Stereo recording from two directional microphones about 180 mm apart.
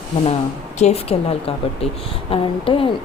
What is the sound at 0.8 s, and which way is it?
A woman's voice, 35° left (ahead or behind).